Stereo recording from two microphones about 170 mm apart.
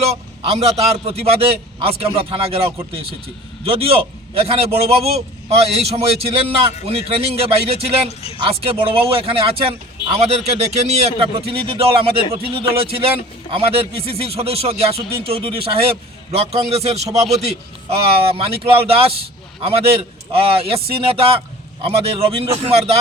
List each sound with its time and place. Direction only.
0.0 s a man's voice: 40° right (ahead or behind)